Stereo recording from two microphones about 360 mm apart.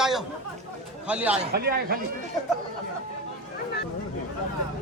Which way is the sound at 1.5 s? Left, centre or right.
Right.